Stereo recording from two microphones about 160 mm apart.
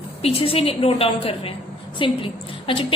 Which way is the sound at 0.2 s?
40° left (ahead or behind).